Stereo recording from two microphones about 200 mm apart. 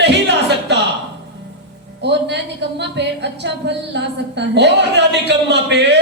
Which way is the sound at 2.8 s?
60° right (ahead or behind).